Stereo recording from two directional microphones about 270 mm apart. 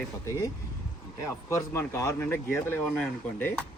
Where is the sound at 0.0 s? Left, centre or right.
Centre.